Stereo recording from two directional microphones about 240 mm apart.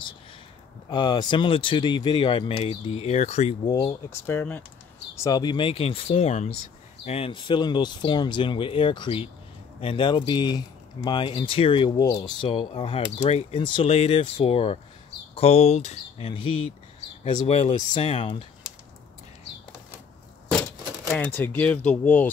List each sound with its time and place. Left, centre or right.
0.8 s speech: centre
3.8 s speech: centre
21.1 s speech: centre